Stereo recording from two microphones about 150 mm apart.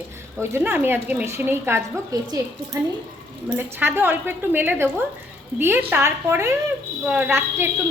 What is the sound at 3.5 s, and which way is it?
Speech, 15° right (ahead or behind).